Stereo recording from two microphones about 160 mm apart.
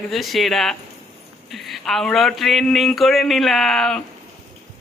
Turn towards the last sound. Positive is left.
turn(degrees=5)  # may be behind; listen again after turning